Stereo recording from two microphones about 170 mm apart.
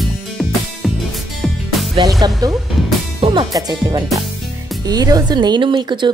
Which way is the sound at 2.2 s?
25° right (ahead or behind).